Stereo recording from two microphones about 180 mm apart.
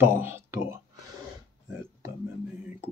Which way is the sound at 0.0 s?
10° right (ahead or behind).